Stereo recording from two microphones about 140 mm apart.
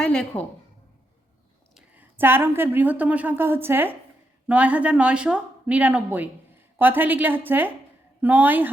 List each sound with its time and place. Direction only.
0.0 s a woman's voice: 10° left (ahead or behind)
1.7 s a woman's voice: 10° right (ahead or behind)